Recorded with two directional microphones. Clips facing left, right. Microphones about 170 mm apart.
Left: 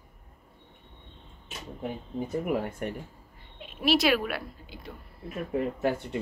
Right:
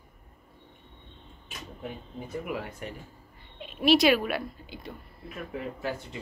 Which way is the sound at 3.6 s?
Centre (ahead or behind).